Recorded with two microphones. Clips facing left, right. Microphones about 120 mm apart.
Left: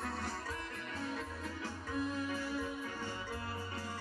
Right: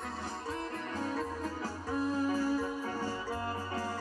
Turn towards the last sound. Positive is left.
turn(degrees=-40)  # may be behind; listen again after turning